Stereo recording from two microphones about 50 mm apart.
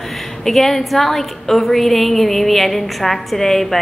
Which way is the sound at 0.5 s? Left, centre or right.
Centre.